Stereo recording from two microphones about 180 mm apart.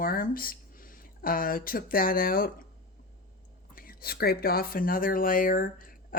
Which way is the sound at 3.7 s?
55° left (ahead or behind).